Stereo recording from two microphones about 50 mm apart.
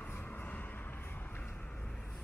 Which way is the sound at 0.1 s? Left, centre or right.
Left.